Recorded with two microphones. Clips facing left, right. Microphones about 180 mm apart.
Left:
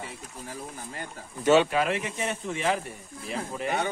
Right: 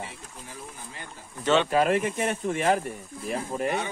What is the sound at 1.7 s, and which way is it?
Speech, 45° right (ahead or behind).